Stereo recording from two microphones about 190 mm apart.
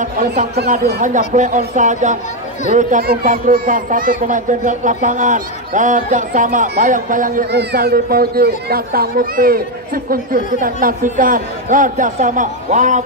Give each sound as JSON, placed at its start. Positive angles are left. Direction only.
{"t": 1.0, "sound": "speech", "side_deg": -40}